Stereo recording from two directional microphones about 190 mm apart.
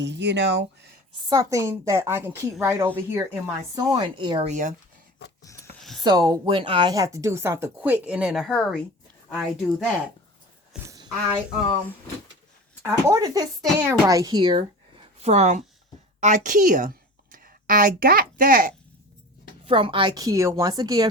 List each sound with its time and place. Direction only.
0.0 s speech: 65° right (ahead or behind)
1.3 s speech: 15° right (ahead or behind)
3.8 s a woman's voice: 25° right (ahead or behind)
4.4 s speech: 40° right (ahead or behind)
5.4 s a sound: 15° left (ahead or behind)
6.0 s speech: 20° right (ahead or behind)
10.8 s a sound: 20° right (ahead or behind)
12.8 s a woman's voice: 15° right (ahead or behind); by 18.7 s 45° right (ahead or behind)
19.6 s a woman's voice: 30° right (ahead or behind)